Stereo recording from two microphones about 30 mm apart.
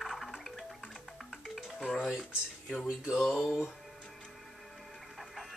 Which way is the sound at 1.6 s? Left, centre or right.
Centre.